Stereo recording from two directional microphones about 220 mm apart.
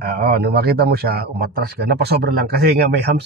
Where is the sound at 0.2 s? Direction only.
45° right (ahead or behind).